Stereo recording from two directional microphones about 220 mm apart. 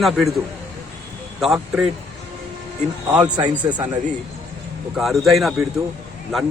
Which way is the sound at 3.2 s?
20° right (ahead or behind).